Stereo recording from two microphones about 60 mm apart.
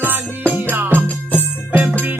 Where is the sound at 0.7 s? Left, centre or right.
Right.